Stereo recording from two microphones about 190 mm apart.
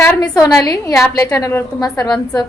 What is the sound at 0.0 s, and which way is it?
A woman's voice, 15° left (ahead or behind).